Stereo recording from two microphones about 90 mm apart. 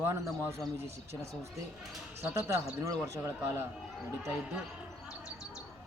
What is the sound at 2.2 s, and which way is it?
A man's voice, 30° right (ahead or behind).